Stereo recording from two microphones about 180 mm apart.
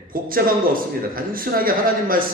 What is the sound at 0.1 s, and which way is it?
A man's voice, 50° right (ahead or behind).